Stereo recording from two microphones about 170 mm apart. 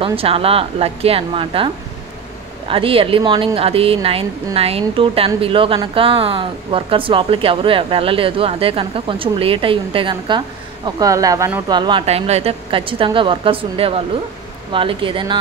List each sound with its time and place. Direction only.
0.0 s speech: 35° right (ahead or behind)
2.7 s speech: 30° right (ahead or behind)
12.1 s speech: 40° right (ahead or behind)